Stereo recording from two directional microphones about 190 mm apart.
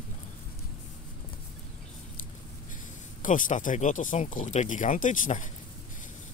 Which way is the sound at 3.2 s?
45° left (ahead or behind).